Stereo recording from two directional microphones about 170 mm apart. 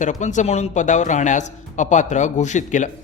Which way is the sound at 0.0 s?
45° left (ahead or behind).